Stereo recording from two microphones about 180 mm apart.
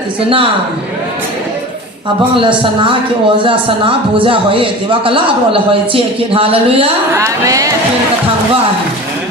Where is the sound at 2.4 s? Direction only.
30° right (ahead or behind).